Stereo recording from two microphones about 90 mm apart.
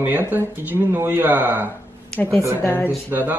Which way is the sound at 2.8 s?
20° right (ahead or behind).